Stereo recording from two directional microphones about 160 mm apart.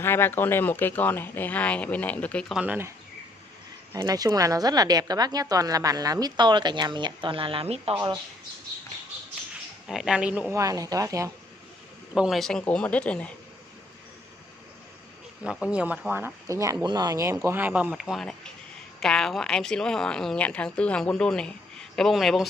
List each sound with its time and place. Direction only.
0.0 s speech: 15° left (ahead or behind); by 2.9 s 10° right (ahead or behind)
3.9 s a woman's voice: 25° right (ahead or behind); by 7.9 s 40° right (ahead or behind)
7.9 s a woman's voice: 25° right (ahead or behind)
9.8 s speech: 5° right (ahead or behind)
10.6 s a woman's voice: 20° right (ahead or behind)
12.1 s speech: centre (ahead or behind)
15.4 s speech: 5° right (ahead or behind)